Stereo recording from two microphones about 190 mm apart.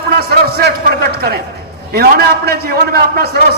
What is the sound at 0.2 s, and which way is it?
Speech, 55° right (ahead or behind).